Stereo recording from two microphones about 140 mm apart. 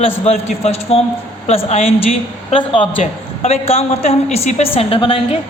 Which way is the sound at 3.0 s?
50° left (ahead or behind).